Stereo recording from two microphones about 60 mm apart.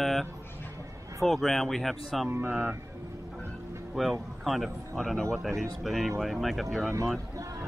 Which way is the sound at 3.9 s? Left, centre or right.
Centre.